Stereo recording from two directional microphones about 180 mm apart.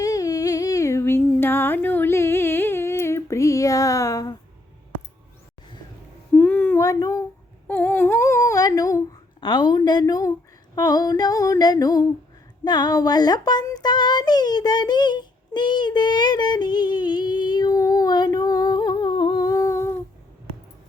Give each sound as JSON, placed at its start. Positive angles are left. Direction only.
{"t": 0.0, "sound": "humming", "side_deg": 20}
{"t": 6.3, "sound": "a sound", "side_deg": 10}
{"t": 7.7, "sound": "humming", "side_deg": 10}
{"t": 10.8, "sound": "female singing", "side_deg": 20}
{"t": 12.6, "sound": "child singing", "side_deg": 25}